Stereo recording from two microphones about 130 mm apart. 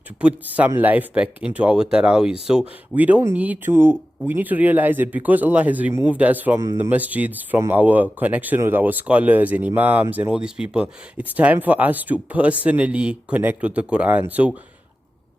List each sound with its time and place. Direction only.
0.2 s speech: 10° right (ahead or behind)
6.6 s speech: 25° right (ahead or behind)